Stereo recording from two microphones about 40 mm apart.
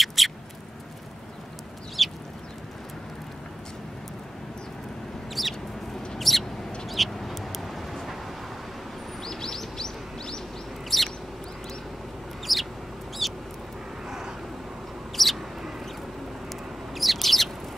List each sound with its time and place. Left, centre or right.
0.0 s a sound: centre
2.0 s chicken: centre
5.4 s chicken: centre
6.1 s mouse: centre
6.9 s duck: centre
9.2 s bird: centre
10.9 s bird: centre
12.5 s bird: centre
13.2 s duck: centre
14.0 s vehicle: centre
15.1 s bird: centre
16.9 s bird: centre